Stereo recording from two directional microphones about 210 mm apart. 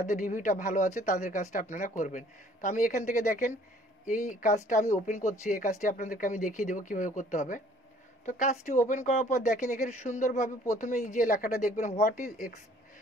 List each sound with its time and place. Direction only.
0.0 s speech: 40° left (ahead or behind)